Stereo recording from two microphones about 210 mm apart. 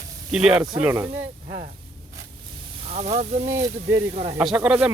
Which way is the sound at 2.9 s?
30° right (ahead or behind).